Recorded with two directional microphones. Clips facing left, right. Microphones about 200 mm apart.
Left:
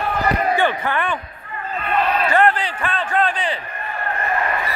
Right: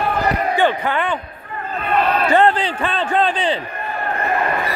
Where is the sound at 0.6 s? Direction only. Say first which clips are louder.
Right 2 dB; 15° right (ahead or behind).